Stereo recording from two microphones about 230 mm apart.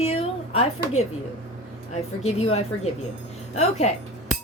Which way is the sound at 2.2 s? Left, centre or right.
Left.